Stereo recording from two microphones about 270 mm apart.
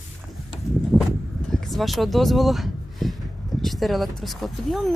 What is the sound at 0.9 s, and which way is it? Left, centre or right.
Vehicle, centre.